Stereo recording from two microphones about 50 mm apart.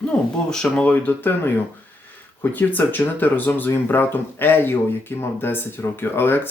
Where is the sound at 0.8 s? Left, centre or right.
Left.